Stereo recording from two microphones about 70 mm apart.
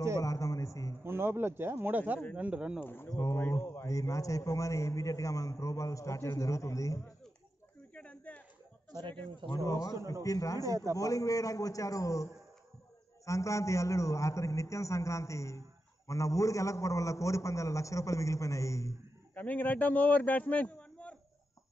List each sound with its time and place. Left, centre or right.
0.2 s a man's voice: left
1.0 s speech: right
2.3 s speech: centre
2.8 s speech: left
3.1 s a man's voice: left
7.9 s a sound: centre
9.6 s a man's voice: left
10.6 s a man's voice: right
11.0 s a man's voice: left
19.3 s a man's voice: left